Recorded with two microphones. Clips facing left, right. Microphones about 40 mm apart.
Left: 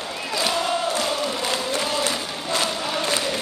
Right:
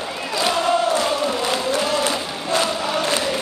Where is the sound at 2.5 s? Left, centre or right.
Centre.